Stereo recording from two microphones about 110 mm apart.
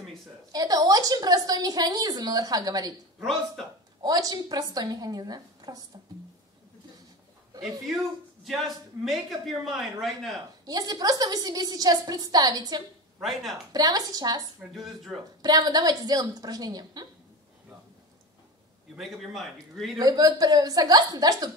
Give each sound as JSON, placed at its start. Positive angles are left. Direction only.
{"t": 0.5, "sound": "a woman's voice", "side_deg": -35}
{"t": 3.2, "sound": "a man's voice", "side_deg": 5}
{"t": 4.0, "sound": "a woman's voice", "side_deg": -35}
{"t": 8.5, "sound": "a man's voice", "side_deg": 0}
{"t": 10.6, "sound": "a woman's voice", "side_deg": -35}
{"t": 13.2, "sound": "a man's voice", "side_deg": 0}
{"t": 13.7, "sound": "a woman's voice", "side_deg": -35}
{"t": 14.7, "sound": "a man's voice", "side_deg": 0}
{"t": 15.4, "sound": "a woman's voice", "side_deg": -35}
{"t": 18.9, "sound": "a man's voice", "side_deg": 0}
{"t": 20.0, "sound": "a woman's voice", "side_deg": -35}